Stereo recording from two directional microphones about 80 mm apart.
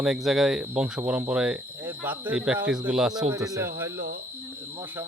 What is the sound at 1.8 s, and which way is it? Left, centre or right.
Speech, right.